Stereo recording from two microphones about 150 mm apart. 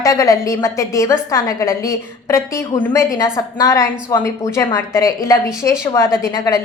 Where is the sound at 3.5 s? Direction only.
20° left (ahead or behind).